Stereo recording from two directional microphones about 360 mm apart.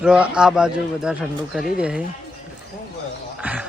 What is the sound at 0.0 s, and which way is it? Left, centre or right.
Speech, centre.